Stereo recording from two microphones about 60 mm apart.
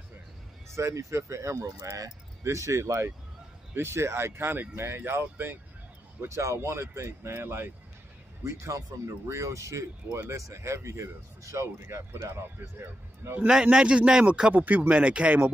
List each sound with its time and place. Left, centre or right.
0.7 s speech: right
3.7 s speech: right
6.2 s speech: right
8.5 s speech: right
13.5 s a man's voice: centre
14.5 s speech: right